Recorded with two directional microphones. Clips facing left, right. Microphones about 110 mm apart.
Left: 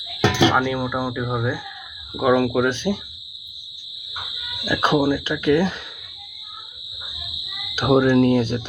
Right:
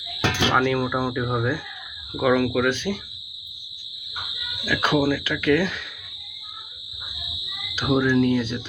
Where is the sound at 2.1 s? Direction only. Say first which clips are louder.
Left 2 dB; 20° left (ahead or behind).